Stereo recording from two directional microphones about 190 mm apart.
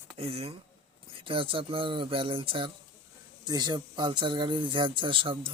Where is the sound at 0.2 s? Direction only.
30° right (ahead or behind).